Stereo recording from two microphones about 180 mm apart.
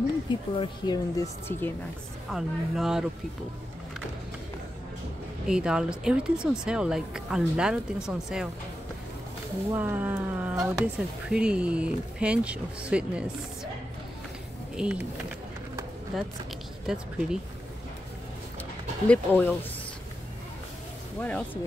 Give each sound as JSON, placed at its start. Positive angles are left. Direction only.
{"t": 0.3, "sound": "speech", "side_deg": 25}
{"t": 2.3, "sound": "speech", "side_deg": 0}
{"t": 5.5, "sound": "speech", "side_deg": -5}
{"t": 9.7, "sound": "speech", "side_deg": -10}
{"t": 14.8, "sound": "speech", "side_deg": -5}
{"t": 16.1, "sound": "speech", "side_deg": 0}
{"t": 19.0, "sound": "speech", "side_deg": 10}
{"t": 21.2, "sound": "speech", "side_deg": 5}